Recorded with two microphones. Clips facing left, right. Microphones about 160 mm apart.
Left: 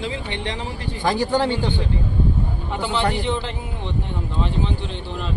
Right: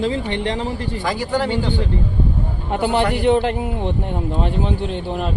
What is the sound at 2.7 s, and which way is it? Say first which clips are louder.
A man's voice: right 5 dB; 55° right (ahead or behind).